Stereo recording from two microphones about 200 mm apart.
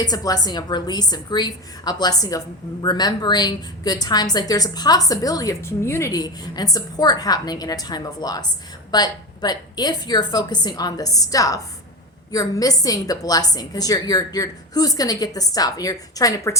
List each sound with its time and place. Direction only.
0.0 s a woman's voice: 20° left (ahead or behind)